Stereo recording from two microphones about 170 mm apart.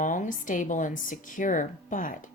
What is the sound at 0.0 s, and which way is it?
Speech, 50° left (ahead or behind).